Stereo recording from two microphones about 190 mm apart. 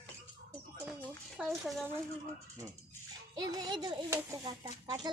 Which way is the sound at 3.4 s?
20° right (ahead or behind).